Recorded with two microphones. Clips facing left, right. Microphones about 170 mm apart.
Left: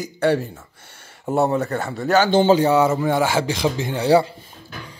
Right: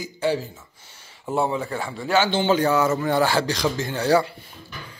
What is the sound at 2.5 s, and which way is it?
Speech, 25° left (ahead or behind).